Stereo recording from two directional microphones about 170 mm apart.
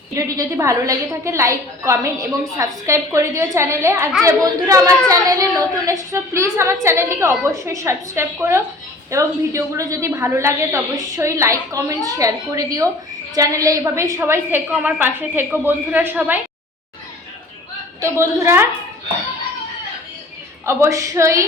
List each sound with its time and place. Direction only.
0.1 s a woman's voice: 20° right (ahead or behind)
18.0 s a woman's voice: 15° right (ahead or behind)
20.7 s a woman's voice: 15° right (ahead or behind)